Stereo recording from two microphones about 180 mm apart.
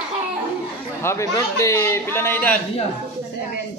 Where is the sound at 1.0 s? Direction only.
15° left (ahead or behind).